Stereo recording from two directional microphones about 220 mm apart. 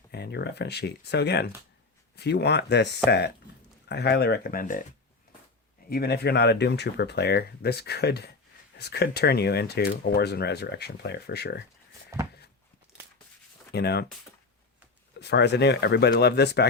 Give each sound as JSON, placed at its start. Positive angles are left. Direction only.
{"t": 0.1, "sound": "speech", "side_deg": 50}
{"t": 5.9, "sound": "speech", "side_deg": 45}
{"t": 12.1, "sound": "a sound", "side_deg": -15}
{"t": 13.7, "sound": "speech", "side_deg": 50}
{"t": 15.2, "sound": "speech", "side_deg": 50}